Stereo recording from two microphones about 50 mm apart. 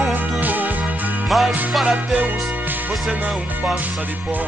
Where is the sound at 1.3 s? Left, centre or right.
Centre.